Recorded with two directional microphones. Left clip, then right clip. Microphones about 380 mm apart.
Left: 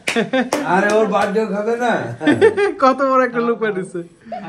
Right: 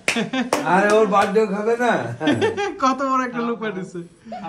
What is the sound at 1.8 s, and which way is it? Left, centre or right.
Speech, centre.